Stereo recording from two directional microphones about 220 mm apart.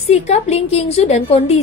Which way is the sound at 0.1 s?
30° left (ahead or behind).